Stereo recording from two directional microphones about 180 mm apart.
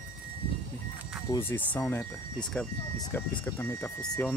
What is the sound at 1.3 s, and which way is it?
Speech, 15° left (ahead or behind).